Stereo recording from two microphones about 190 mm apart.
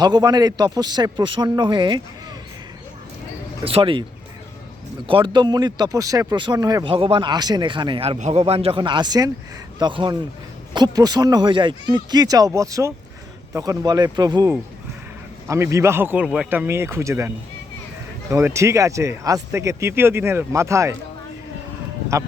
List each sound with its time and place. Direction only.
0.0 s speech: 20° right (ahead or behind)
3.6 s speech: 30° right (ahead or behind)
5.0 s speech: 25° right (ahead or behind)
22.1 s speech: 15° right (ahead or behind)